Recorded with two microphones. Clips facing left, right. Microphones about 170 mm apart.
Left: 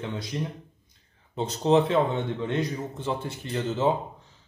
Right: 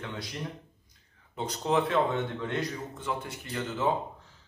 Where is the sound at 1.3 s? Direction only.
25° left (ahead or behind).